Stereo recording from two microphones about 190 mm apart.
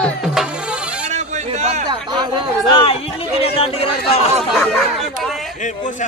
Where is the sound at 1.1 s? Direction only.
35° right (ahead or behind).